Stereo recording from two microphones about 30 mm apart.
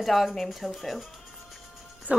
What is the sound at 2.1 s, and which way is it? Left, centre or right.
Speech, right.